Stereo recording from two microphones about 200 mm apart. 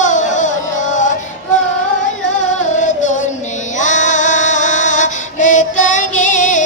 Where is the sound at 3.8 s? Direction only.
40° left (ahead or behind).